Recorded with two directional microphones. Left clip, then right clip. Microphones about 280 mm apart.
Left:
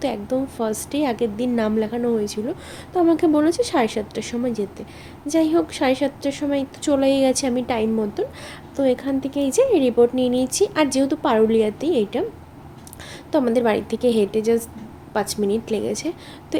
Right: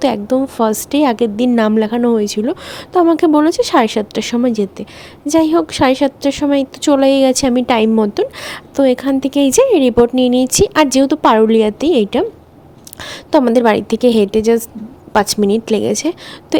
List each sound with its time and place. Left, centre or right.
0.0 s a woman's voice: right